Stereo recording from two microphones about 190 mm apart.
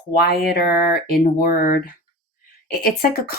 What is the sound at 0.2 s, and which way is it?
Speech, 55° left (ahead or behind).